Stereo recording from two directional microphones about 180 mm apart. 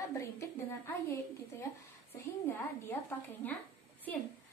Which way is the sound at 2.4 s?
10° left (ahead or behind).